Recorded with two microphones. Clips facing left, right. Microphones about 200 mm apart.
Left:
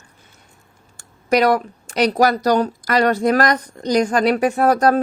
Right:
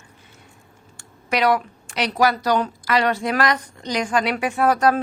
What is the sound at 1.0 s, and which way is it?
Speech, 40° left (ahead or behind).